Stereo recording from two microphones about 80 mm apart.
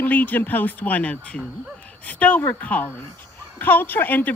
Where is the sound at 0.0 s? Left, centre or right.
Left.